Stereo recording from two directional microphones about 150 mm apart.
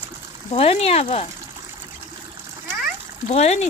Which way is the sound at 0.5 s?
45° left (ahead or behind).